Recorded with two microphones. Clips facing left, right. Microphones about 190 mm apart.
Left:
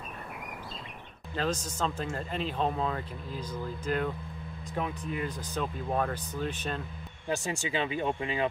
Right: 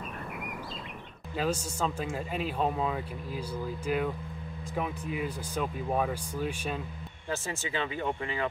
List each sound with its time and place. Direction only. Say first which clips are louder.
1.3 s speech: right 1 dB; 10° right (ahead or behind)
7.2 s speech: left 3 dB; 15° left (ahead or behind)